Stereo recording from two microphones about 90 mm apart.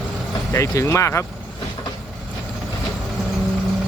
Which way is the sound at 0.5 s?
35° left (ahead or behind).